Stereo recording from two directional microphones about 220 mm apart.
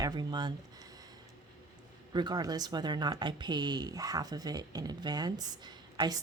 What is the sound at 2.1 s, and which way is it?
Speech, 20° right (ahead or behind).